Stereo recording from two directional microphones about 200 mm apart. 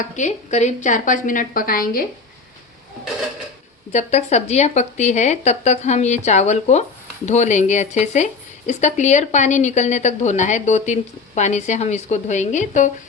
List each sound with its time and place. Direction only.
0.0 s speech: 35° left (ahead or behind)
3.9 s speech: 35° left (ahead or behind)